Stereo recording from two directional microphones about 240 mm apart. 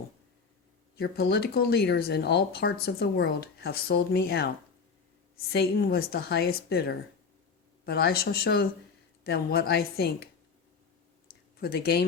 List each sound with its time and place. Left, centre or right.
0.9 s speech: left
5.5 s speech: left
11.6 s speech: left